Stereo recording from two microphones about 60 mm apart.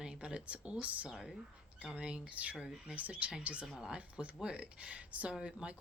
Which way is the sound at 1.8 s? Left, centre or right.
Centre.